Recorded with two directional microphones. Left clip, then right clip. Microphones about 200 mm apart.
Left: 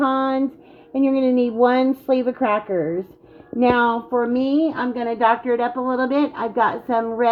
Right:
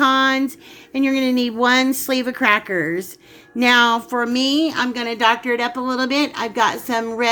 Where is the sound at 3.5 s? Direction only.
10° right (ahead or behind).